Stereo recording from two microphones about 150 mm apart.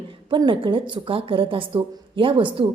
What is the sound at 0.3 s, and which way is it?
A woman's voice, 35° right (ahead or behind).